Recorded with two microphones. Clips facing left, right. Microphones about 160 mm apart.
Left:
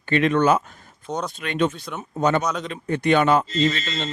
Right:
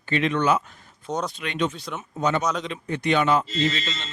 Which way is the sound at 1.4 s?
50° left (ahead or behind).